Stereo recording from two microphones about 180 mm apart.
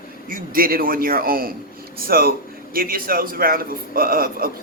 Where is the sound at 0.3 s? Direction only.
50° right (ahead or behind).